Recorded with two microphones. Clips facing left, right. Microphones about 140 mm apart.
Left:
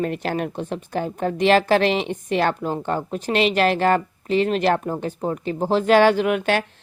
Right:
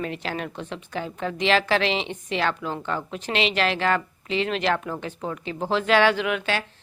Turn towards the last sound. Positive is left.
turn(degrees=50)  # may be behind; listen again after turning